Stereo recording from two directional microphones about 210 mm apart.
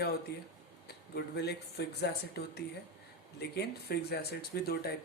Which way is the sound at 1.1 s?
50° left (ahead or behind).